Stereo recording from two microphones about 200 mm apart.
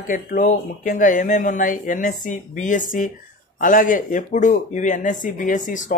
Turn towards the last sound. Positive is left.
turn(degrees=40)  # may be behind; listen again after turning